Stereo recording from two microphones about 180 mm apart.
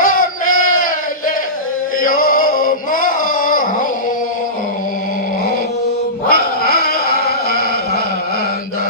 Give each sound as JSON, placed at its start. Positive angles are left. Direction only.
{"t": 0.0, "sound": "battle cry", "side_deg": 50}
{"t": 2.0, "sound": "male singing", "side_deg": 50}
{"t": 6.2, "sound": "cat", "side_deg": 55}